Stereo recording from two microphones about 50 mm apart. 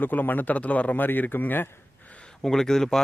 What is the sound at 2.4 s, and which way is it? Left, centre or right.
Speech, centre.